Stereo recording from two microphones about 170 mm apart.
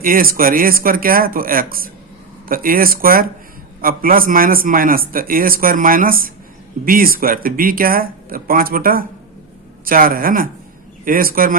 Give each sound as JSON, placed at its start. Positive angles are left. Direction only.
{"t": 0.0, "sound": "a man's voice", "side_deg": -55}